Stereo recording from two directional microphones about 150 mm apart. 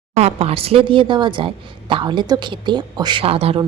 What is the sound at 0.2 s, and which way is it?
A woman's voice, 45° right (ahead or behind).